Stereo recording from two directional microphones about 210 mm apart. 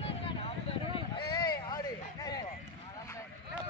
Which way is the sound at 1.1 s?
20° left (ahead or behind).